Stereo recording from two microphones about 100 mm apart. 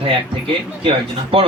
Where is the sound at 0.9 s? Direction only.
65° right (ahead or behind).